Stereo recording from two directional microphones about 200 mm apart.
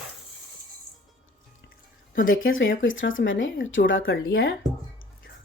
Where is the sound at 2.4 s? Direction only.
75° left (ahead or behind).